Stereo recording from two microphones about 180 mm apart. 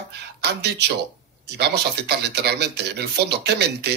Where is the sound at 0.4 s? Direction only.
70° right (ahead or behind).